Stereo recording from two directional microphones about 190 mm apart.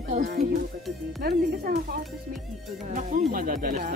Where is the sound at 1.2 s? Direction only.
55° right (ahead or behind).